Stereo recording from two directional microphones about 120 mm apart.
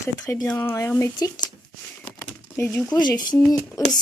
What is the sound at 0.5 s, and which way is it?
Speech, 20° left (ahead or behind).